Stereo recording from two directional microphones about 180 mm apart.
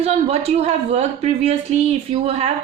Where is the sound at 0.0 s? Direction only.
35° right (ahead or behind).